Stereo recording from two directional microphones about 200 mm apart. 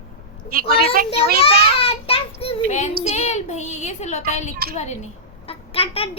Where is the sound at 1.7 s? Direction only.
30° left (ahead or behind).